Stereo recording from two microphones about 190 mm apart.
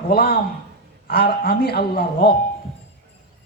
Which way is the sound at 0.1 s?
55° left (ahead or behind).